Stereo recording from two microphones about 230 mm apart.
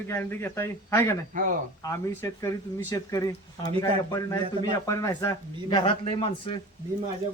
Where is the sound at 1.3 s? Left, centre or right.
Right.